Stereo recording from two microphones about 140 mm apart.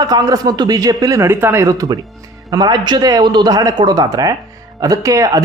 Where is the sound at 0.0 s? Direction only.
25° right (ahead or behind).